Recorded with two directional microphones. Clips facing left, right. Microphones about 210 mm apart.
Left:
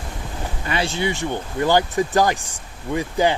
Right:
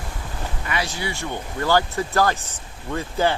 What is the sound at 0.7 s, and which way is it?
Speech, 30° left (ahead or behind).